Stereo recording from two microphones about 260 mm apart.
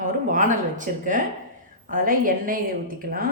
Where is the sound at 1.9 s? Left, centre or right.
Right.